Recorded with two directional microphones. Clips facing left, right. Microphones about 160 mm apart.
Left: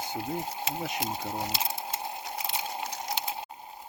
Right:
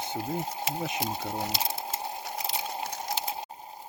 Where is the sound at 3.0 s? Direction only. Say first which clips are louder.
Right 1 dB; 40° right (ahead or behind).